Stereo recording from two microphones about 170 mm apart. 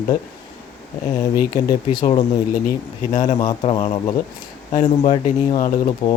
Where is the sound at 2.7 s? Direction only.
45° left (ahead or behind).